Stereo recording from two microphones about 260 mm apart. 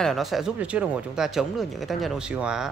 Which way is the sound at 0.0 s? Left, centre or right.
Centre.